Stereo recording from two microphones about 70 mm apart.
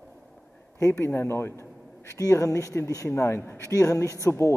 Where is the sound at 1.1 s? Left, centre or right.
Left.